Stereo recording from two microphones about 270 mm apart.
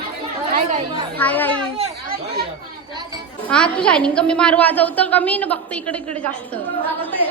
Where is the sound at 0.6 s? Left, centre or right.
Right.